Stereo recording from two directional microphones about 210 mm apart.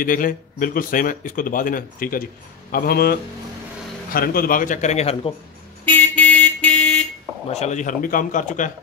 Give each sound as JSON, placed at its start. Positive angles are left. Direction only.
{"t": 0.0, "sound": "speech", "side_deg": 40}
{"t": 5.9, "sound": "vehicle", "side_deg": 10}
{"t": 7.4, "sound": "speech", "side_deg": 30}